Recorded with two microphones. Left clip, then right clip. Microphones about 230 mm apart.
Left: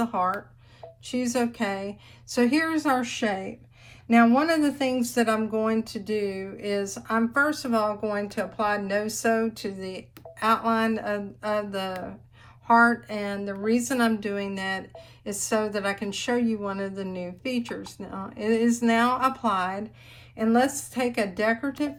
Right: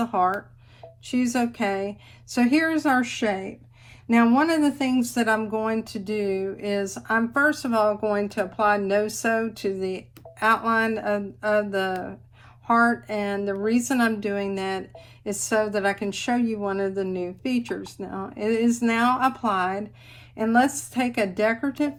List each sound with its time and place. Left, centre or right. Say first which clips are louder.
0.0 s speech: right 3 dB; left